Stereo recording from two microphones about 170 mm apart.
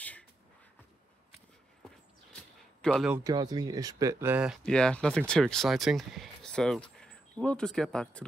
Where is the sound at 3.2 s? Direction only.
20° right (ahead or behind).